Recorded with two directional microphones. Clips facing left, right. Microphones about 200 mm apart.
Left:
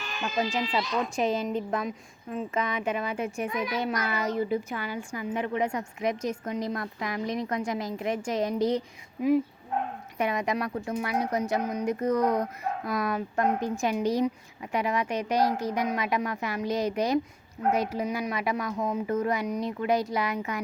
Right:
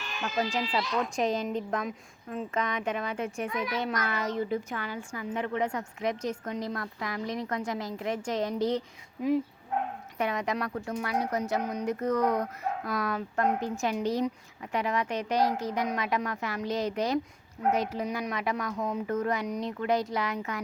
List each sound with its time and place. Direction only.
0.2 s a child's voice: 15° left (ahead or behind)
0.9 s a woman's voice: 5° left (ahead or behind)
10.2 s a child's voice: 10° left (ahead or behind)